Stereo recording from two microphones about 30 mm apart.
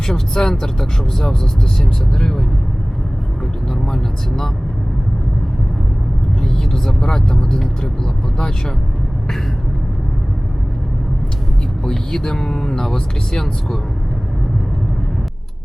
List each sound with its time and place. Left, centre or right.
0.0 s speech: centre
3.7 s vehicle: centre
6.4 s speech: centre
11.9 s speech: left